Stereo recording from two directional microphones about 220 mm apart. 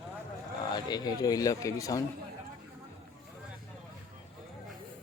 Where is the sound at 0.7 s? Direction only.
20° left (ahead or behind).